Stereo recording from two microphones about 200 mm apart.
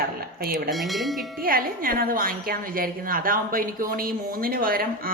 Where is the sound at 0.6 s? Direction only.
Centre (ahead or behind).